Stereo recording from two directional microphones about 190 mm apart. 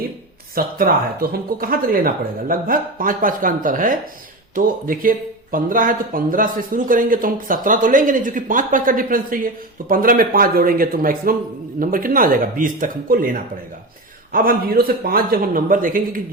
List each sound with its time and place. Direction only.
0.5 s speech: 50° right (ahead or behind)